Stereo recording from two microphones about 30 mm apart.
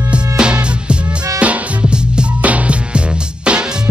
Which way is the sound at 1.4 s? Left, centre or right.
Right.